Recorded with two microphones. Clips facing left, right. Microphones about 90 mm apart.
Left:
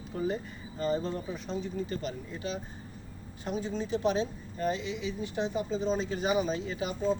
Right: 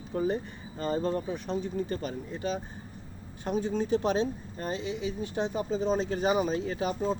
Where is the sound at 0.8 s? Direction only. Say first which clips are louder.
Right 2 dB; 45° right (ahead or behind).